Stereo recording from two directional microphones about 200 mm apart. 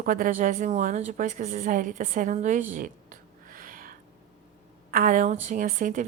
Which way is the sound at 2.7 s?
40° right (ahead or behind).